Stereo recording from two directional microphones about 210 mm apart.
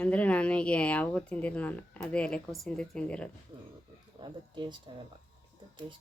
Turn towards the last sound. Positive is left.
turn(degrees=-20)  # may be behind; listen again after turning